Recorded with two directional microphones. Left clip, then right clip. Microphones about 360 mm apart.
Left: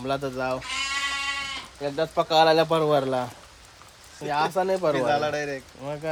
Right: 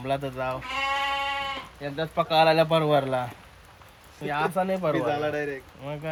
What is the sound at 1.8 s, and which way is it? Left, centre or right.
Speech, centre.